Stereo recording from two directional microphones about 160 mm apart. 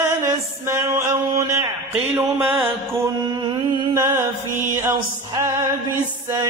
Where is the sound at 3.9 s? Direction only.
15° right (ahead or behind).